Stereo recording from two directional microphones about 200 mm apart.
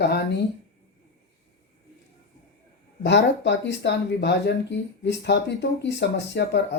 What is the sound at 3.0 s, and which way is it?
Speech, 60° left (ahead or behind).